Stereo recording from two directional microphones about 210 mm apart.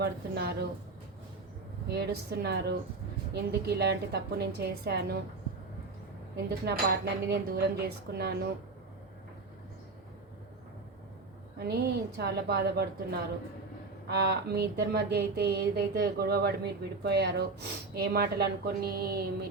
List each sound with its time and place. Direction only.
0.0 s speech: 50° right (ahead or behind)
1.9 s speech: 50° right (ahead or behind)
6.5 s speech: 50° right (ahead or behind)
11.5 s speech: 50° right (ahead or behind)